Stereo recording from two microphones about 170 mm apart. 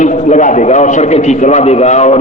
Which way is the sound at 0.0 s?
45° left (ahead or behind).